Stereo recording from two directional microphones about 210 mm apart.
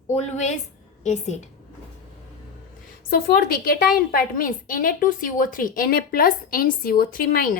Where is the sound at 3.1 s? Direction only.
45° left (ahead or behind).